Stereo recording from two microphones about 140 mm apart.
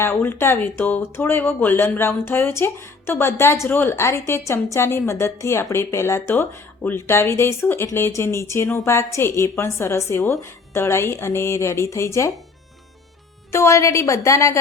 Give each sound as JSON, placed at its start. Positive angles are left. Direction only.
{"t": 0.0, "sound": "speech", "side_deg": 15}
{"t": 13.5, "sound": "speech", "side_deg": 20}